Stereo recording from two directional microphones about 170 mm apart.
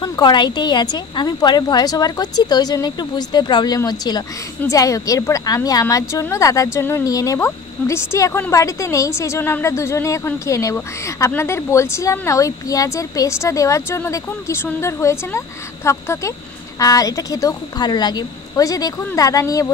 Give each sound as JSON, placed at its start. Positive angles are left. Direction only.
{"t": 0.0, "sound": "a woman's voice", "side_deg": 25}